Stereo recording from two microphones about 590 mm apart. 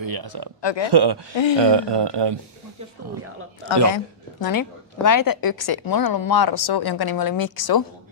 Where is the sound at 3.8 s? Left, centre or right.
Left.